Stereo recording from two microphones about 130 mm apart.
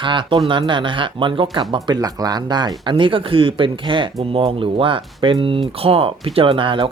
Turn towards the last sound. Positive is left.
turn(degrees=-40)  # may be behind; listen again after turning